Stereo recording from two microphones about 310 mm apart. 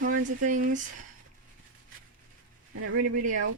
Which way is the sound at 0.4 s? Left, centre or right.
Right.